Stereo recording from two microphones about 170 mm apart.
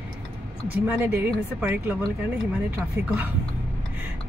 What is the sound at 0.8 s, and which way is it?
A woman's voice, 10° right (ahead or behind).